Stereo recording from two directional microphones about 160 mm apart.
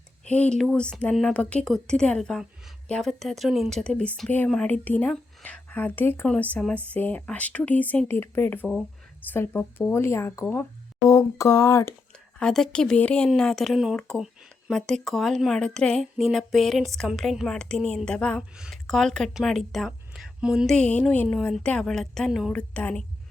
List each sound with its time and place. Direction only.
0.3 s speech: 5° left (ahead or behind)
11.1 s a sound: 20° left (ahead or behind)
12.4 s speech: 5° left (ahead or behind)